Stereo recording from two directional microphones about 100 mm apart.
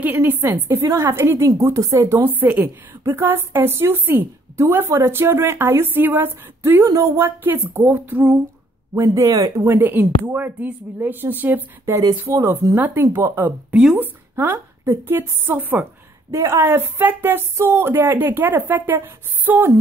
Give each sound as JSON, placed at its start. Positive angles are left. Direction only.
{"t": 0.0, "sound": "a woman's voice", "side_deg": -20}
{"t": 2.2, "sound": "a woman's voice", "side_deg": -15}
{"t": 8.9, "sound": "speech", "side_deg": -30}
{"t": 9.7, "sound": "a woman's voice", "side_deg": -20}
{"t": 13.7, "sound": "speech", "side_deg": -5}
{"t": 13.9, "sound": "a woman's voice", "side_deg": -20}